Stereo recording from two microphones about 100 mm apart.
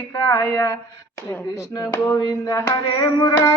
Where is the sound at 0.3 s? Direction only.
30° left (ahead or behind).